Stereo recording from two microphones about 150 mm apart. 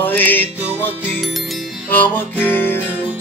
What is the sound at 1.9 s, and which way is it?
Music, 10° left (ahead or behind).